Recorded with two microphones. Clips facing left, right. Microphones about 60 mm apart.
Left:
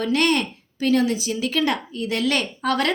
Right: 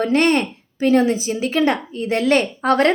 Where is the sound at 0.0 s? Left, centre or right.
Right.